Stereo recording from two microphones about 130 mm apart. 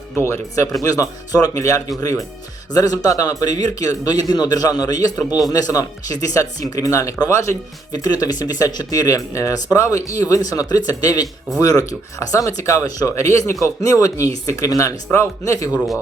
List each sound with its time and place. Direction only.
0.2 s speech: 20° left (ahead or behind)